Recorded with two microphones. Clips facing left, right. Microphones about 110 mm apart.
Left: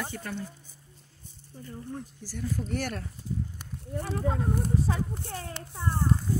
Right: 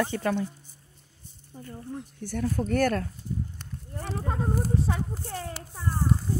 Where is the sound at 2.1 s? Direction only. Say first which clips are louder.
Right 8 dB; 60° right (ahead or behind).